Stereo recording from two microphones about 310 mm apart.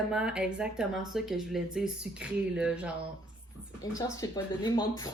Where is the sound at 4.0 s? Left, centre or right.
Centre.